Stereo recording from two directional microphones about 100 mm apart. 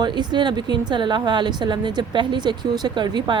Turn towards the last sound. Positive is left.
turn(degrees=-50)  # may be behind; listen again after turning